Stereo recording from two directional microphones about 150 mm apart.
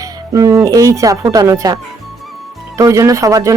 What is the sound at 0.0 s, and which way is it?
Speech, 20° right (ahead or behind).